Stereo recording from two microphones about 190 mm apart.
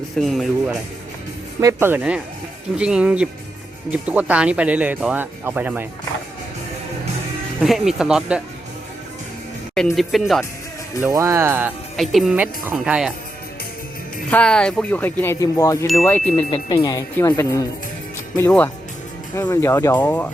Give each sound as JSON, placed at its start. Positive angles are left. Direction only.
{"t": 0.2, "sound": "speech", "side_deg": 0}
{"t": 7.6, "sound": "speech", "side_deg": 0}
{"t": 9.7, "sound": "speech", "side_deg": 0}
{"t": 11.0, "sound": "speech", "side_deg": -15}
{"t": 11.9, "sound": "speech", "side_deg": 0}
{"t": 14.3, "sound": "speech", "side_deg": 5}
{"t": 16.5, "sound": "speech", "side_deg": 20}